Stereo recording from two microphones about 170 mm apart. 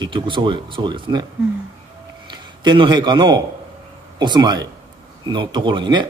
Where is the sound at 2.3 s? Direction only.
25° right (ahead or behind).